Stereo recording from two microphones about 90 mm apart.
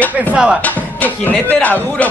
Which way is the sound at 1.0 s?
20° left (ahead or behind).